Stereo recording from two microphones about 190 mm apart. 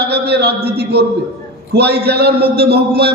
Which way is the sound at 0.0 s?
55° right (ahead or behind).